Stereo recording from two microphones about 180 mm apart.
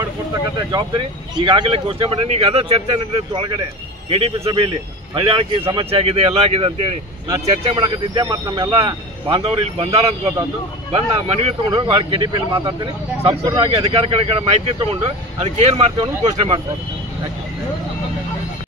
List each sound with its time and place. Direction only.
0.6 s speech: 25° right (ahead or behind)